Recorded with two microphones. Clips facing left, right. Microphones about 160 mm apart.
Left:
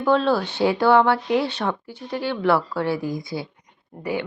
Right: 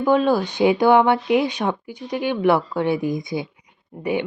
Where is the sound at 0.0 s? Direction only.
15° right (ahead or behind).